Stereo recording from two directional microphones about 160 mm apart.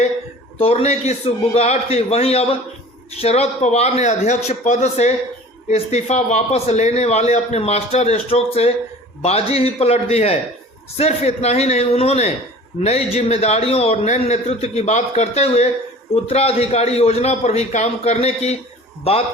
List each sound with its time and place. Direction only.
0.6 s a man's voice: 40° left (ahead or behind)